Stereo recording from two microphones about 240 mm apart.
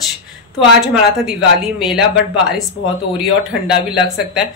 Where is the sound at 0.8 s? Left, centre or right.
Centre.